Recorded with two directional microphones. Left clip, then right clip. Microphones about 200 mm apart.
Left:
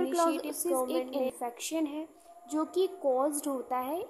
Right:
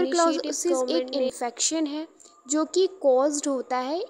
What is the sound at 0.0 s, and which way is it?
A woman's voice, 15° right (ahead or behind).